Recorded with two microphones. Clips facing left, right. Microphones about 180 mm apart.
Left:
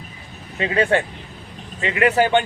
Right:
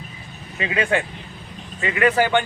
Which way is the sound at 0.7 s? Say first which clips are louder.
Left 3 dB; 35° left (ahead or behind).